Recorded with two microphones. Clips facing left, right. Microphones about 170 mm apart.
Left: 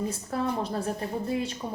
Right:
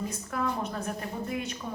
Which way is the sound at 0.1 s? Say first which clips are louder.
Left 2 dB; 30° left (ahead or behind).